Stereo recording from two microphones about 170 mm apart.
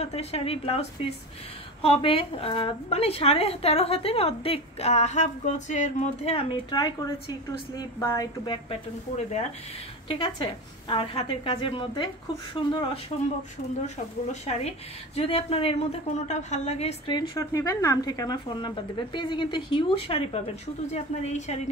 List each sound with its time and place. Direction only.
0.0 s a woman's voice: 35° left (ahead or behind)
6.5 s a woman's voice: 25° left (ahead or behind)
9.1 s speech: 40° left (ahead or behind)
10.0 s a woman's voice: 30° left (ahead or behind)
13.8 s a woman's voice: 40° left (ahead or behind)